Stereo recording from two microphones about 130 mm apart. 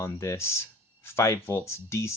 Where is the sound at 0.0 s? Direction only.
20° left (ahead or behind).